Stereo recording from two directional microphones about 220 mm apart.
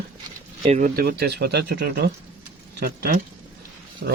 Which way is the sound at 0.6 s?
30° right (ahead or behind).